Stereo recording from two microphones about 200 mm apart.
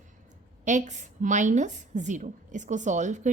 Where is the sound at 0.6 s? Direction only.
35° right (ahead or behind).